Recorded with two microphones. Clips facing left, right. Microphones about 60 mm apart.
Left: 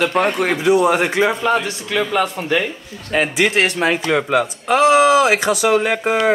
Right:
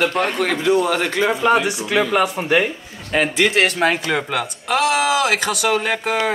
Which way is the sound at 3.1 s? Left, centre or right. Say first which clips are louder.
Left 1 dB; centre.